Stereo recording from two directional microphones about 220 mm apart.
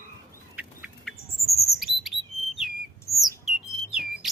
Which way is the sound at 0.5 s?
5° right (ahead or behind).